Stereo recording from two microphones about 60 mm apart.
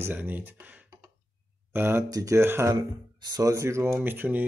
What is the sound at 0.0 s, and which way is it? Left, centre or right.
Speech, right.